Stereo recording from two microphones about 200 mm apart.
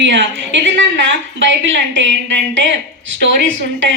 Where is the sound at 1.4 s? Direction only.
65° right (ahead or behind).